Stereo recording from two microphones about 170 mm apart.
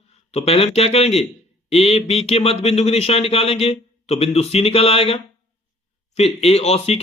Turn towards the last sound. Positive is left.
turn(degrees=35)  # may be behind; listen again after turning